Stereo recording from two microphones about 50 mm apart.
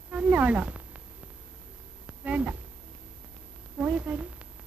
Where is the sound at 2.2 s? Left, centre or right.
Right.